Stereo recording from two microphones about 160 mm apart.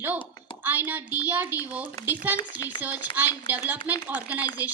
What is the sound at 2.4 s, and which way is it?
Speech, 30° left (ahead or behind).